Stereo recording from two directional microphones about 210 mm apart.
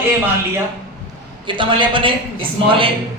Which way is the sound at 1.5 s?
25° right (ahead or behind).